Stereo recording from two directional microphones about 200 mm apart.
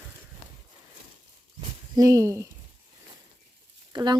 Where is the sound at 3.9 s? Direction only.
20° right (ahead or behind).